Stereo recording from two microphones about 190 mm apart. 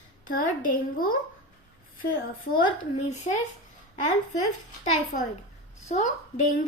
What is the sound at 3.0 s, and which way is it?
Speech, 40° left (ahead or behind).